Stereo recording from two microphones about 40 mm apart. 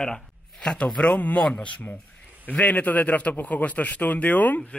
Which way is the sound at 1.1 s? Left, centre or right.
Left.